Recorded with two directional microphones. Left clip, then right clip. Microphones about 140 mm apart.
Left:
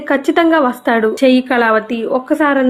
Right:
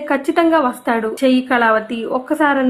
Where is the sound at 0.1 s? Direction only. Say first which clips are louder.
Left 3 dB; 30° left (ahead or behind).